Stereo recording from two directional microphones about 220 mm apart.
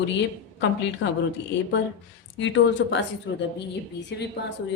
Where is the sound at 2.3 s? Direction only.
55° left (ahead or behind).